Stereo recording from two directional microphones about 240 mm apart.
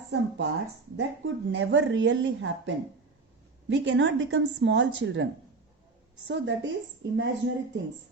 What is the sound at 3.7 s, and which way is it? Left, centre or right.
A woman's voice, right.